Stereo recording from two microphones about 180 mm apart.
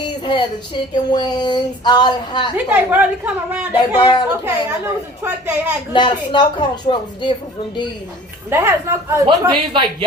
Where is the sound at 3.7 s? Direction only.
25° left (ahead or behind).